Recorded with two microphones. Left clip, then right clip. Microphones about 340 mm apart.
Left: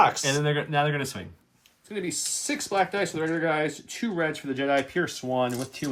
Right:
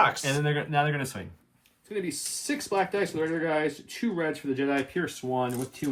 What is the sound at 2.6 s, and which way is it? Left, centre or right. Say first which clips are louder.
Speech: left 2 dB; left.